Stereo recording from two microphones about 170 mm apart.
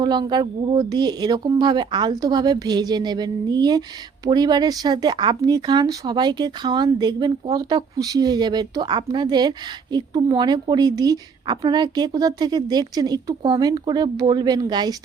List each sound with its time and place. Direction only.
0.0 s speech: 25° right (ahead or behind)